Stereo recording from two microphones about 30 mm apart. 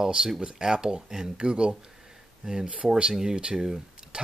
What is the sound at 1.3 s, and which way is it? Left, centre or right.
Speech, right.